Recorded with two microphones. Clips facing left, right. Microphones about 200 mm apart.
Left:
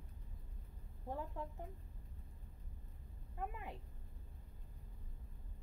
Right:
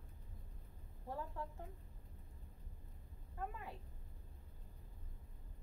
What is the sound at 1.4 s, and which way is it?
Speech, 20° left (ahead or behind).